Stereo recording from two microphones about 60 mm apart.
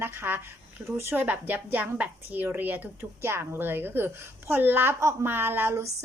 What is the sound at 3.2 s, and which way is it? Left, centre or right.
Speech, right.